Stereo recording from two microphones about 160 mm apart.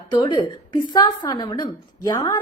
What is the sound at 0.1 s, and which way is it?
A woman's voice, 30° left (ahead or behind).